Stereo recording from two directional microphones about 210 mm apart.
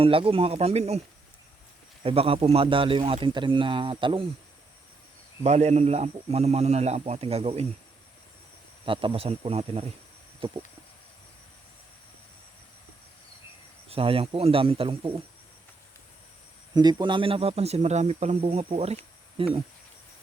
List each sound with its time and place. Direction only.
0.0 s speech: 25° right (ahead or behind)
2.0 s speech: 25° right (ahead or behind)
5.4 s a man's voice: 30° right (ahead or behind)
8.8 s speech: 25° right (ahead or behind)
13.9 s speech: 25° right (ahead or behind)
16.7 s speech: 20° right (ahead or behind)